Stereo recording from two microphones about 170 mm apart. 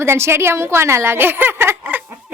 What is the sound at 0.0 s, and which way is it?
A woman's voice, 15° right (ahead or behind).